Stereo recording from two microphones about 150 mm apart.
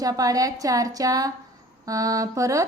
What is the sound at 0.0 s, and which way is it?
A woman's voice, 25° right (ahead or behind).